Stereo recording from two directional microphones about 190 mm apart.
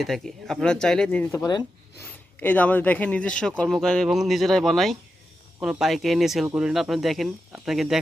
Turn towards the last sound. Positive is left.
turn(degrees=0)  # may be behind; listen again after turning